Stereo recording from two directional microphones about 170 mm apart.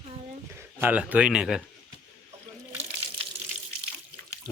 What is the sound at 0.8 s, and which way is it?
Speech, 10° right (ahead or behind).